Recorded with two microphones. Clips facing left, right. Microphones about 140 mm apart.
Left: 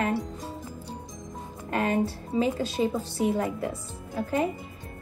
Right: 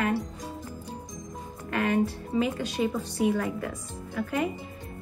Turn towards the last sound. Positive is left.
turn(degrees=30)  # may be behind; listen again after turning